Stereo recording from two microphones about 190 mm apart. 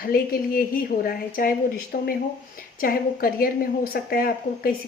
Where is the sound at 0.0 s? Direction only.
50° left (ahead or behind).